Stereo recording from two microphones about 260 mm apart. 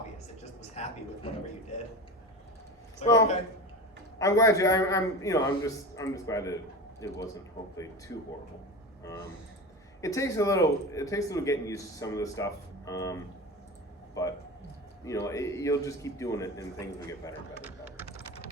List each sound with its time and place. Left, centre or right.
0.7 s speech: left
3.0 s speech: centre
10.0 s a man's voice: centre
17.6 s a sound: centre